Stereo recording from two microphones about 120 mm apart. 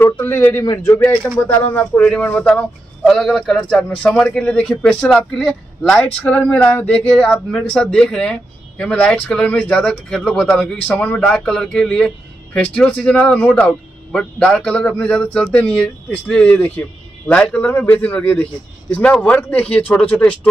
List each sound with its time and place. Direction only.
0.0 s a man's voice: 20° left (ahead or behind)